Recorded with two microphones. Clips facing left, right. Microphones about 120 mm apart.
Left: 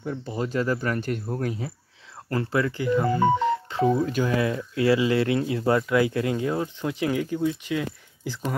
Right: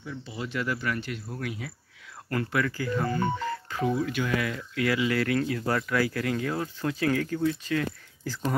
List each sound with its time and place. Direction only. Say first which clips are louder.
0.0 s speech: left 7 dB; 45° left (ahead or behind)
2.2 s speech: left 3 dB; 25° left (ahead or behind)
3.9 s speech: left 4 dB; 40° left (ahead or behind); by 8.5 s 15° left (ahead or behind)